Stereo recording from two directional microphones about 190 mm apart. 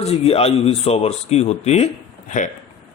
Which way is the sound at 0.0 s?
35° left (ahead or behind).